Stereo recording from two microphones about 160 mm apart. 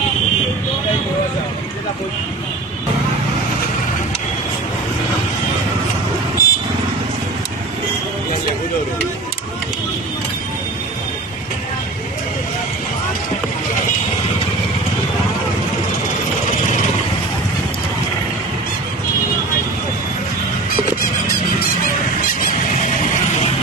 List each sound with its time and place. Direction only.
6.4 s vehicle: 65° left (ahead or behind)